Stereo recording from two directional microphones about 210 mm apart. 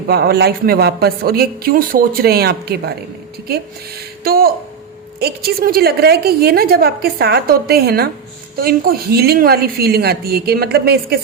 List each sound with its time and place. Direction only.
0.1 s a woman's voice: 50° right (ahead or behind)
4.2 s a woman's voice: 45° right (ahead or behind)